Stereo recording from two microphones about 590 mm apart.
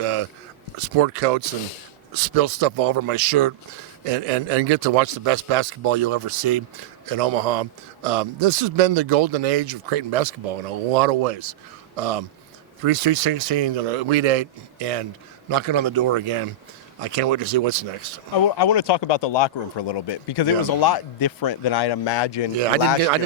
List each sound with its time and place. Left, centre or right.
0.0 s a sound: right
0.8 s a man's voice: right
4.0 s a man's voice: right
10.9 s speech: right
11.9 s a man's voice: right
15.4 s a man's voice: right
18.3 s speech: left
22.5 s a man's voice: right